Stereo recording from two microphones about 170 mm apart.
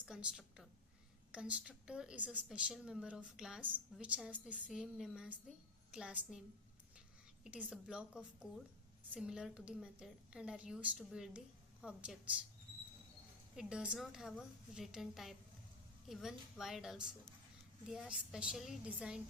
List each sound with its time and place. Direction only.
0.0 s a woman's voice: 5° right (ahead or behind)
7.4 s a woman's voice: 5° right (ahead or behind)
13.6 s a woman's voice: 5° right (ahead or behind)